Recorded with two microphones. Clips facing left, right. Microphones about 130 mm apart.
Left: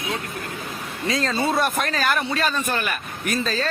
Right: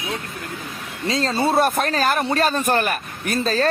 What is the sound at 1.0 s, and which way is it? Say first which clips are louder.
A man's voice: right 2 dB; 30° right (ahead or behind).